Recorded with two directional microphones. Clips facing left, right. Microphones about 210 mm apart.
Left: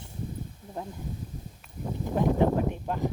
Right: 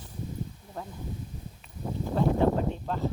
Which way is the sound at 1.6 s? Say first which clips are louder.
Even; centre (ahead or behind).